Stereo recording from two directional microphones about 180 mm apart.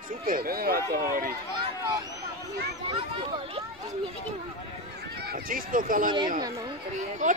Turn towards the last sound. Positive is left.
turn(degrees=-45)  # may be behind; listen again after turning